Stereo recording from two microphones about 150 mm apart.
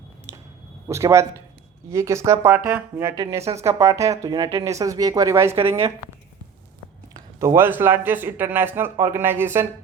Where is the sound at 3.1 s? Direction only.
25° right (ahead or behind).